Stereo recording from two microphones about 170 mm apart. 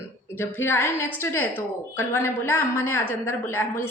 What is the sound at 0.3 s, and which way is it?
A woman's voice, 15° left (ahead or behind).